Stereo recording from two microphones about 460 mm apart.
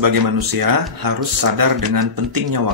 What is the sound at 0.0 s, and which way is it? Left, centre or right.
Speech, right.